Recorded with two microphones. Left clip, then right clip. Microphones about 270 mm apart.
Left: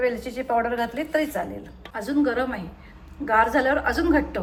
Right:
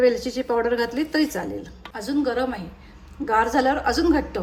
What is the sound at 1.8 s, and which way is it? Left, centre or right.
A woman's voice, centre.